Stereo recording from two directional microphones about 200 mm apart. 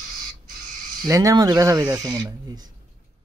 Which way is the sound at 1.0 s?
15° right (ahead or behind).